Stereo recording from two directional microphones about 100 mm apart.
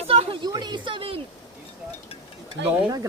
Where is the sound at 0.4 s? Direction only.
45° right (ahead or behind); by 1.2 s 60° right (ahead or behind).